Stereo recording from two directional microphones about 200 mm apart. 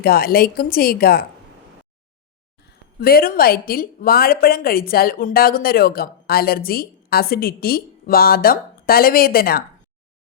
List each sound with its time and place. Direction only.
0.0 s a woman's voice: 50° left (ahead or behind)
3.0 s a woman's voice: 45° left (ahead or behind)